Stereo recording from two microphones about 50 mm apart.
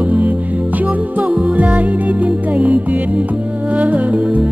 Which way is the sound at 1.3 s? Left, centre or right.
Right.